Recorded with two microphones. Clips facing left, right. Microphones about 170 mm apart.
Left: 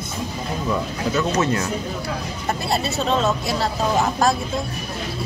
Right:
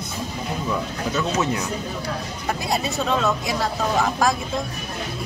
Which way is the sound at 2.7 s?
15° right (ahead or behind).